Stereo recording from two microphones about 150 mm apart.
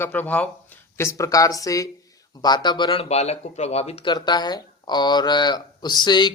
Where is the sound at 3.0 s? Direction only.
45° left (ahead or behind).